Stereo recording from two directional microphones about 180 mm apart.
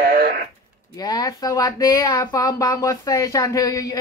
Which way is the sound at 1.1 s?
20° left (ahead or behind).